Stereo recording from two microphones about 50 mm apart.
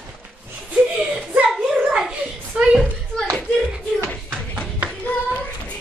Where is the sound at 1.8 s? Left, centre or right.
Centre.